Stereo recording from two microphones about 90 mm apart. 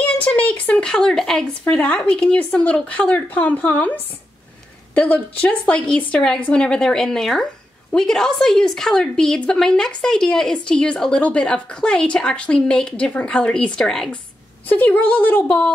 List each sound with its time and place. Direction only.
0.0 s a sound: 15° left (ahead or behind)
1.6 s a woman's voice: 20° left (ahead or behind)
14.7 s a woman's voice: 20° left (ahead or behind)